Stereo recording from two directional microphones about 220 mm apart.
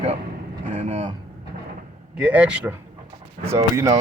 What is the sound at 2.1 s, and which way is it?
Speech, 5° right (ahead or behind).